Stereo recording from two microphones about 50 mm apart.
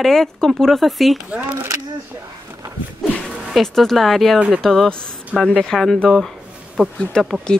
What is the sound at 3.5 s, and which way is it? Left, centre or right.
Speech, centre.